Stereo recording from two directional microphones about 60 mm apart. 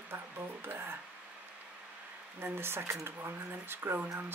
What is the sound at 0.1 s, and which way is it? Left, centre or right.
Music, right.